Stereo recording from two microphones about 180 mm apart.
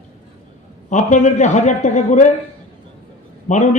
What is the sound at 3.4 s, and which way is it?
Speech, 40° left (ahead or behind).